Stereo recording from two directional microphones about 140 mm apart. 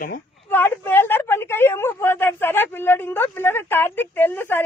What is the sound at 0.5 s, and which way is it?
Speech, 15° left (ahead or behind).